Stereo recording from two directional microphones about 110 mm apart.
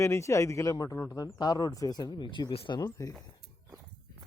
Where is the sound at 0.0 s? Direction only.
25° left (ahead or behind); by 2.8 s 50° left (ahead or behind).